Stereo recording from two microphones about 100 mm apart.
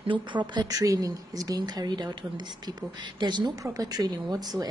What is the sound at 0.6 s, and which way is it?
Speech, 35° right (ahead or behind).